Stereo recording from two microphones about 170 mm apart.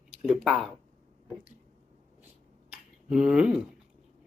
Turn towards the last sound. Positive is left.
turn(degrees=-5)  # may be behind; listen again after turning